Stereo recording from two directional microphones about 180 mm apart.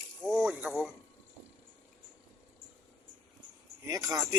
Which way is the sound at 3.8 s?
20° right (ahead or behind).